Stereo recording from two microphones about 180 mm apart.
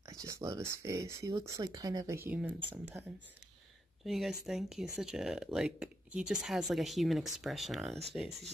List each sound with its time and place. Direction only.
0.0 s speech: 20° right (ahead or behind)
4.0 s speech: centre (ahead or behind)